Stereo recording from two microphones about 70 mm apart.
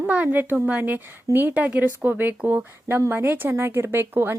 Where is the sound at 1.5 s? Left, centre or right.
Centre.